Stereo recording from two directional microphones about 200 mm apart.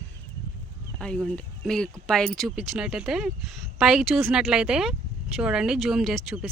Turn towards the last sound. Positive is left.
turn(degrees=0)  # may be behind; listen again after turning